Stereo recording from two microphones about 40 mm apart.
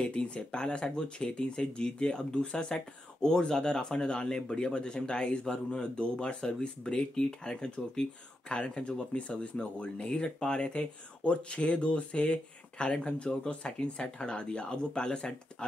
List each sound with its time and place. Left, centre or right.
0.0 s speech: left